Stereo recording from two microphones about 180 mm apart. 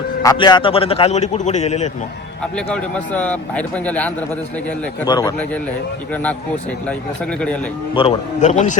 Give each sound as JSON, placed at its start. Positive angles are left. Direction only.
{"t": 0.2, "sound": "a man's voice", "side_deg": 20}
{"t": 2.4, "sound": "speech", "side_deg": 5}
{"t": 5.0, "sound": "a man's voice", "side_deg": 20}
{"t": 7.9, "sound": "a man's voice", "side_deg": 35}